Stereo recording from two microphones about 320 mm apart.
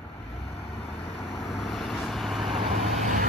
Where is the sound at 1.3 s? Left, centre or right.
Centre.